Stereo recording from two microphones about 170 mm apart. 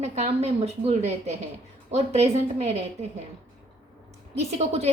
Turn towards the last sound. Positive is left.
turn(degrees=-40)  # may be behind; listen again after turning